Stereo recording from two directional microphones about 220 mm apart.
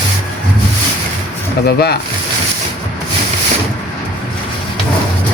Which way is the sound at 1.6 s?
45° left (ahead or behind).